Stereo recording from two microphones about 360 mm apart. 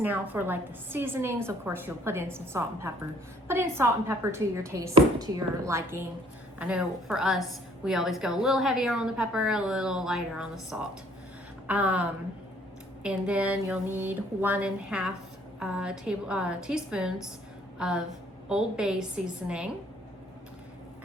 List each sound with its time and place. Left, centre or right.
0.0 s a woman's voice: centre